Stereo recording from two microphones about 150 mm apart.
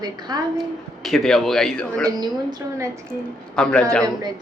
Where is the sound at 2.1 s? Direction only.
25° right (ahead or behind).